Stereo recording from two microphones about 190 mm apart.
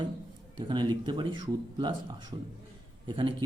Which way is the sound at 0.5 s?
25° right (ahead or behind).